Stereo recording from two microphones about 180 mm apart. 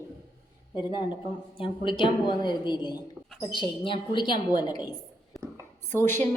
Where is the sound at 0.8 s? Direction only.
25° left (ahead or behind).